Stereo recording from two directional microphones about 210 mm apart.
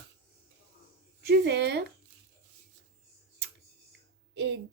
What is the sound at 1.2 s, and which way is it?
Speech, 55° right (ahead or behind).